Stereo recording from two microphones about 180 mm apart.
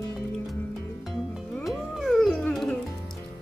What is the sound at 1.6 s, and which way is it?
Music, centre (ahead or behind).